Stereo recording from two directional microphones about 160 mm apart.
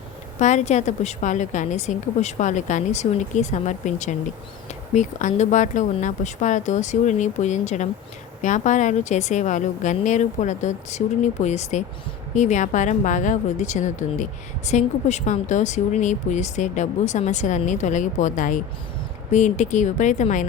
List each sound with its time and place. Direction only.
0.3 s a woman's voice: 45° left (ahead or behind)